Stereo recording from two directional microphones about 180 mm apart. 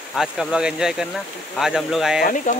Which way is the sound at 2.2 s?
45° left (ahead or behind).